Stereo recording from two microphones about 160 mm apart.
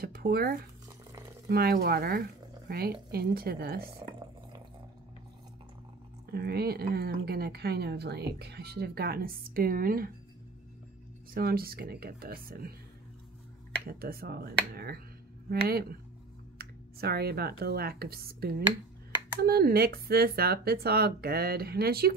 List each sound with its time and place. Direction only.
0.0 s speech: 75° right (ahead or behind)
0.8 s a sound: 20° right (ahead or behind)
1.5 s speech: 75° right (ahead or behind)
6.3 s speech: 80° right
11.3 s speech: 70° right (ahead or behind)
13.8 s speech: 70° right (ahead or behind)